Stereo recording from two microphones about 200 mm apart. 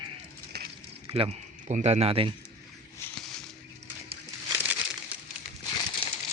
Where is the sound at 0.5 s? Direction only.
55° right (ahead or behind).